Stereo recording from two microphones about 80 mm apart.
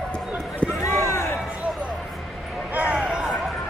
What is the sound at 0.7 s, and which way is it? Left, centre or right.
Run, left.